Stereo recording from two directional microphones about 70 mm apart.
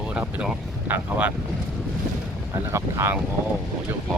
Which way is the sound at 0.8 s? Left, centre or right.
Right.